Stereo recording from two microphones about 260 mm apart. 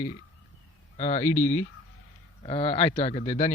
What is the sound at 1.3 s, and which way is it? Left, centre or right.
Speech, centre.